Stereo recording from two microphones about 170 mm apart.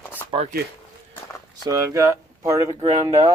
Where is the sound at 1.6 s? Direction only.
20° right (ahead or behind).